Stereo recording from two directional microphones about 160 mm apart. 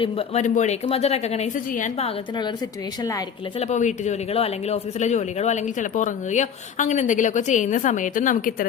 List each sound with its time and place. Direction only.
0.0 s speech: 35° left (ahead or behind)
0.4 s speech: 50° left (ahead or behind)
3.0 s speech: 25° left (ahead or behind)
3.6 s speech: 45° left (ahead or behind)